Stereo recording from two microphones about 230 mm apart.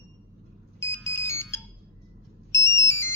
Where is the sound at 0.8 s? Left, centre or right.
Centre.